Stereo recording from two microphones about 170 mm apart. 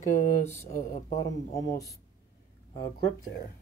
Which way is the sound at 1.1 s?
20° left (ahead or behind).